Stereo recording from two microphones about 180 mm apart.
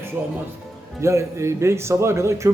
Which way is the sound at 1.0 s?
15° right (ahead or behind).